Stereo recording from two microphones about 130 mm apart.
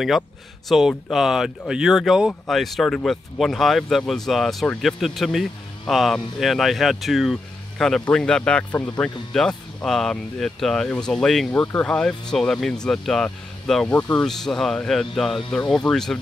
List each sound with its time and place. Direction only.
0.7 s speech: centre (ahead or behind)
13.9 s speech: 15° left (ahead or behind)
14.2 s speech: 5° left (ahead or behind)